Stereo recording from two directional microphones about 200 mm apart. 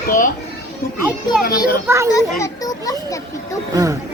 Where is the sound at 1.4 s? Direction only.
45° left (ahead or behind).